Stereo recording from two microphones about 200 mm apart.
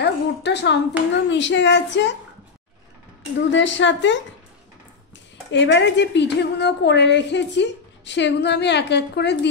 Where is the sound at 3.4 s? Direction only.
65° left (ahead or behind).